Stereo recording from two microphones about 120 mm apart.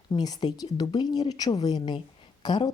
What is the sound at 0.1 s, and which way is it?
Speech, 35° left (ahead or behind).